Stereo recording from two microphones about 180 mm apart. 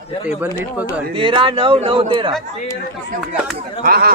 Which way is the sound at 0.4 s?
10° right (ahead or behind).